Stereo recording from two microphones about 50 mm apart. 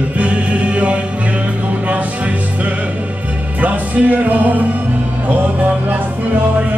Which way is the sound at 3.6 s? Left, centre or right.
Right.